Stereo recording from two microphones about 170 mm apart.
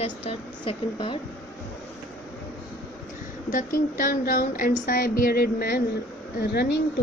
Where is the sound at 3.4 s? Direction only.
55° left (ahead or behind).